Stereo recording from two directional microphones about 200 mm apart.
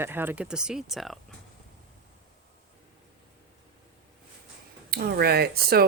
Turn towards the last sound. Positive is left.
turn(degrees=-50)  # may be behind; listen again after turning